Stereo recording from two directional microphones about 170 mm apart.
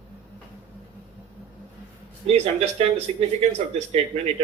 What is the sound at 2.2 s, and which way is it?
Speech, 40° right (ahead or behind).